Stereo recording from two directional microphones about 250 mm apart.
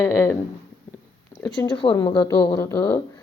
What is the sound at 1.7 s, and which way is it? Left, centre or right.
Speech, centre.